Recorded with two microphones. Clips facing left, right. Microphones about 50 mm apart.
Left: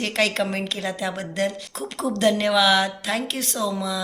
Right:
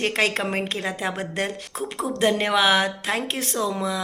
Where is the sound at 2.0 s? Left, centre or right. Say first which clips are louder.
Left 2 dB; right.